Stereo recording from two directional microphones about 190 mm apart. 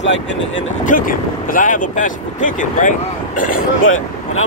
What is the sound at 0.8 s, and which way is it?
Speech, 45° left (ahead or behind).